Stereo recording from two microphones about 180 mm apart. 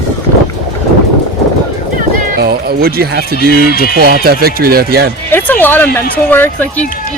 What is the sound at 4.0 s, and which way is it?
Speech, 55° right (ahead or behind).